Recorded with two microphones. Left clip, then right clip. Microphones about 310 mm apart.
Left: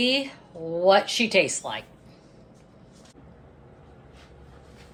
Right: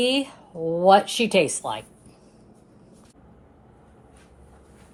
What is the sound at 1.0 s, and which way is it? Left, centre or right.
Speech, centre.